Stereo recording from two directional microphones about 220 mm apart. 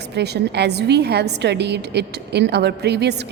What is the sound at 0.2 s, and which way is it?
A woman's voice, 50° right (ahead or behind).